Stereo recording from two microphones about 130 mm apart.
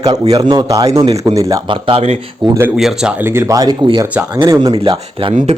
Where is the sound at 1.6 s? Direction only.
40° right (ahead or behind).